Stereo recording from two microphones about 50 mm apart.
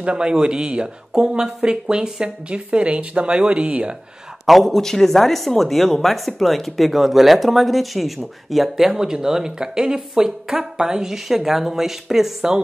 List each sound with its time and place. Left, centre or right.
0.0 s speech: centre
4.5 s speech: centre